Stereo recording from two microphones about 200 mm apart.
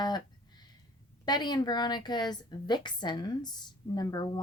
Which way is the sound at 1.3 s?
20° left (ahead or behind).